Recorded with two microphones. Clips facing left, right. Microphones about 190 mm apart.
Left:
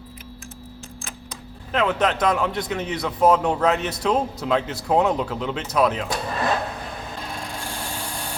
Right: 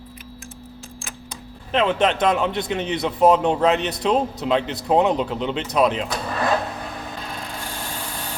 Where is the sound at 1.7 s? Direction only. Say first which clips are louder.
Right 2 dB; 25° right (ahead or behind).